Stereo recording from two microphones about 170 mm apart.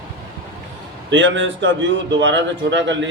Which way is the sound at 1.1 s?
90° right.